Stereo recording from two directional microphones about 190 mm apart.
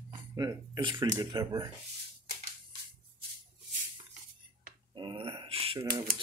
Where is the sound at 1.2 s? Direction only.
20° right (ahead or behind).